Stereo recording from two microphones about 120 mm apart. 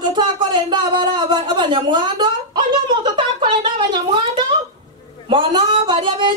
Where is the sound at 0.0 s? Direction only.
40° right (ahead or behind).